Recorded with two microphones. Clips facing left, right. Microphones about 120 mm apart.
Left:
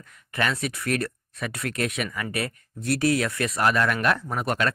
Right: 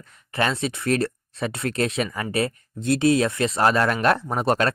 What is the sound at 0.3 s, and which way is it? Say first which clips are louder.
Speech: right 3 dB; 25° right (ahead or behind).